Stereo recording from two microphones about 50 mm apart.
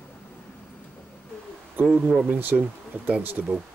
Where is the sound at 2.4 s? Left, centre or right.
Right.